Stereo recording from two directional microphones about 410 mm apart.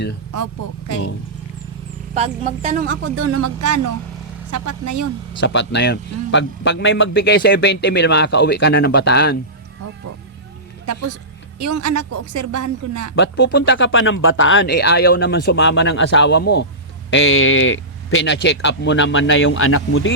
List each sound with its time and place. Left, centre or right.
2.1 s speech: centre
3.2 s speech: right
5.4 s a man's voice: left
11.6 s speech: right
13.1 s a man's voice: left